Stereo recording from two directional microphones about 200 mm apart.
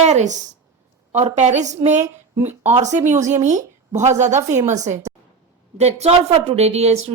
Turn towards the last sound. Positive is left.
turn(degrees=-30)  # may be behind; listen again after turning